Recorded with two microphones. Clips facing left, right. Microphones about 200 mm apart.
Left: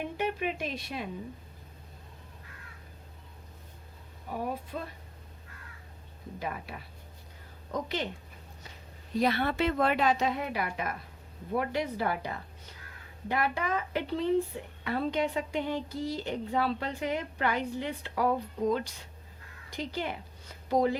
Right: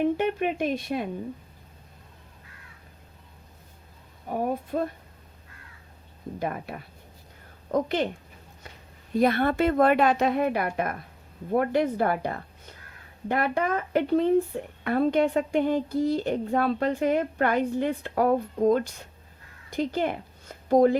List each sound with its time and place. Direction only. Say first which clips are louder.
0.2 s speech: right 6 dB; 50° right (ahead or behind)
4.3 s speech: right 7 dB; 50° right (ahead or behind)
6.4 s speech: right 6 dB; 50° right (ahead or behind)
9.1 s a woman's voice: right 6 dB; 50° right (ahead or behind)